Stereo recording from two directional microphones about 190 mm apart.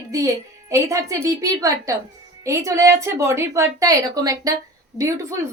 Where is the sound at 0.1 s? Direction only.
15° right (ahead or behind).